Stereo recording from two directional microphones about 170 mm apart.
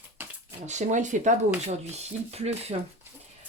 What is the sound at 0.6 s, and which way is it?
Speech, 45° right (ahead or behind).